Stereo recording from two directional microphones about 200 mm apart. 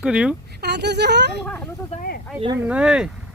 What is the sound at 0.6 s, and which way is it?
Speech, 55° right (ahead or behind).